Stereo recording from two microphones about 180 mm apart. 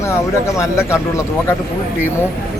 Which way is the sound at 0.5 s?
15° left (ahead or behind).